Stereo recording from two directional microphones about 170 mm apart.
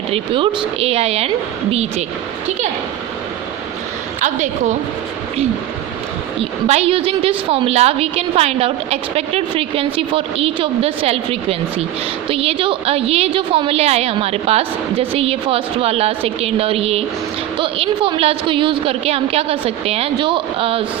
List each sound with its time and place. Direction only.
0.1 s a woman's voice: 30° right (ahead or behind)
4.2 s a woman's voice: 45° right (ahead or behind)
6.4 s a woman's voice: 35° right (ahead or behind)